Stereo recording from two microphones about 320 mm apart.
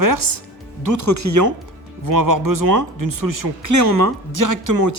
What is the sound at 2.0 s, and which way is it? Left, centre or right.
Speech, right.